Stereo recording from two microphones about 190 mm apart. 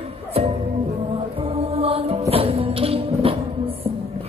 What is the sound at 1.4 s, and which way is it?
Music, 30° right (ahead or behind).